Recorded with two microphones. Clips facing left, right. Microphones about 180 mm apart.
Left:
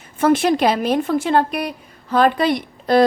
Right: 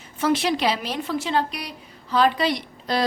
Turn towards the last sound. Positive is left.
turn(degrees=50)  # may be behind; listen again after turning